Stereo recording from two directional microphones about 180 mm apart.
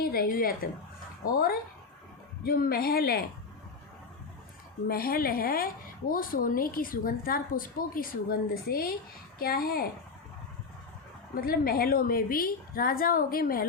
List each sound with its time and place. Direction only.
0.0 s a woman's voice: 55° left (ahead or behind)
4.9 s a woman's voice: 55° left (ahead or behind)
11.3 s a woman's voice: 55° left (ahead or behind)